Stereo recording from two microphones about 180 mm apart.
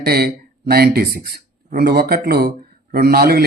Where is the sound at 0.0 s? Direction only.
60° right (ahead or behind).